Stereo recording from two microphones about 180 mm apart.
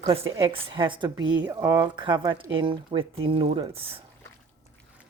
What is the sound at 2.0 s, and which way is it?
Speech, 25° right (ahead or behind).